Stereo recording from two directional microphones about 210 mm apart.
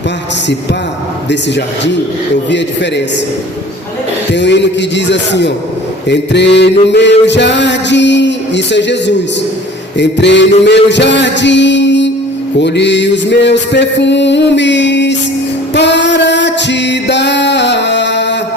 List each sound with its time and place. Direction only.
1.3 s mantra: 55° left (ahead or behind)
4.3 s mantra: 55° left (ahead or behind)
15.7 s music: 55° left (ahead or behind)